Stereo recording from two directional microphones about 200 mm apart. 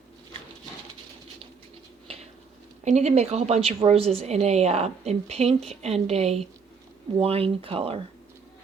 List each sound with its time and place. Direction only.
2.8 s a woman's voice: 35° right (ahead or behind)